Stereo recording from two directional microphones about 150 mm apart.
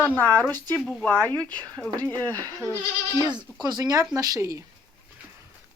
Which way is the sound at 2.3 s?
20° right (ahead or behind).